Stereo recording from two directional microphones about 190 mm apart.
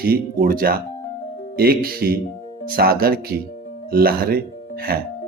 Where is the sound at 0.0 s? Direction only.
50° right (ahead or behind).